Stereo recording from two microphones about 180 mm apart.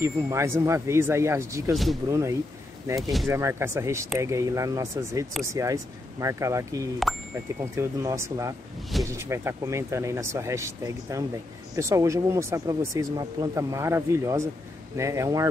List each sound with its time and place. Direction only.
0.0 s speech: 15° right (ahead or behind)
3.0 s speech: centre (ahead or behind)
3.3 s speech: 15° right (ahead or behind)